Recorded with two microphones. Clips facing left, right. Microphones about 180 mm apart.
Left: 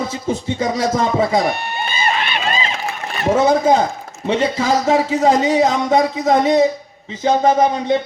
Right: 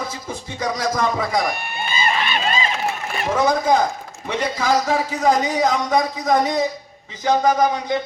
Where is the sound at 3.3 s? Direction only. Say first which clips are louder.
Left 5 dB; 25° left (ahead or behind).